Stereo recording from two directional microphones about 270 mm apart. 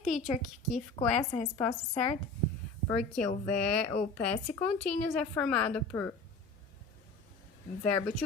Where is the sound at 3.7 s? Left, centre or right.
Centre.